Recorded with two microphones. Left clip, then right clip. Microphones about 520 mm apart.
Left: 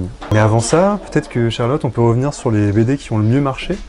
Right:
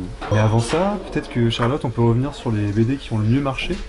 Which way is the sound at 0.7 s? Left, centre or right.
Left.